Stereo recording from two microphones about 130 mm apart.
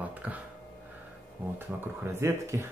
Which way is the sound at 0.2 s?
10° right (ahead or behind).